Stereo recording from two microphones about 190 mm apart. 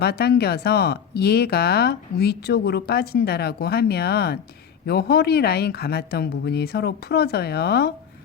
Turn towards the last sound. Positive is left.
turn(degrees=55)  # may be behind; listen again after turning